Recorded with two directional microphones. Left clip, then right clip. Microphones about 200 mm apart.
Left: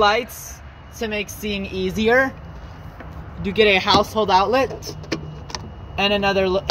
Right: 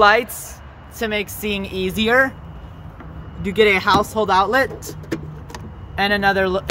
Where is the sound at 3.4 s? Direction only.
5° left (ahead or behind).